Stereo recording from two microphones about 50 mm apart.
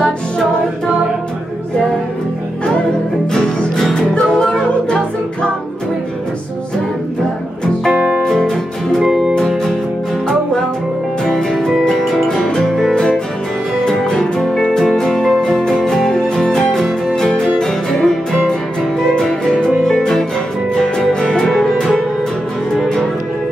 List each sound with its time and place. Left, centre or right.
3.3 s music: centre
4.8 s a capella: centre
8.2 s music: centre
11.2 s music: centre